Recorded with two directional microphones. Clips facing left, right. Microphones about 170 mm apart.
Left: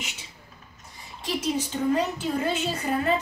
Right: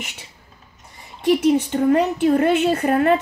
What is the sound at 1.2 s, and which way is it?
A woman's voice, 55° right (ahead or behind).